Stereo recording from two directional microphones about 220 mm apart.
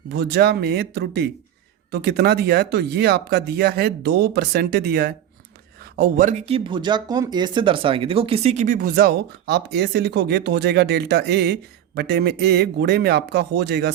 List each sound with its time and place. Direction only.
0.1 s speech: 50° right (ahead or behind)